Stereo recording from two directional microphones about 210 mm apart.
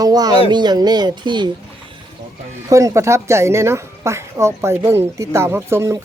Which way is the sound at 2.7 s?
15° right (ahead or behind).